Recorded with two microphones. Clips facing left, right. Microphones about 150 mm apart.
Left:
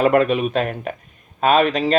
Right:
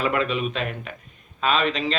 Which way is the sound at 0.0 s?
50° left (ahead or behind).